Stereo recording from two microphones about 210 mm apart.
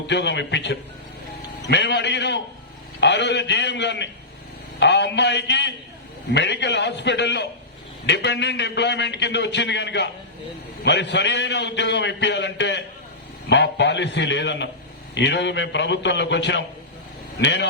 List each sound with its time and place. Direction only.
0.1 s a man's voice: 55° left (ahead or behind)